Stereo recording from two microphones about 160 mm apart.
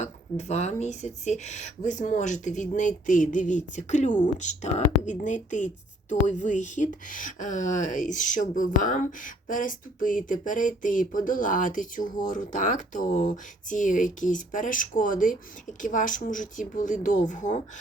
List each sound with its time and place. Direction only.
0.0 s speech: 45° left (ahead or behind)